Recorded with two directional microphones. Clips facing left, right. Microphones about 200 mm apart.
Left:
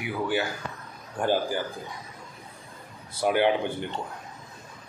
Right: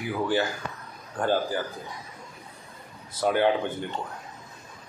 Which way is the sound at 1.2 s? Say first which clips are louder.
Even; 10° left (ahead or behind).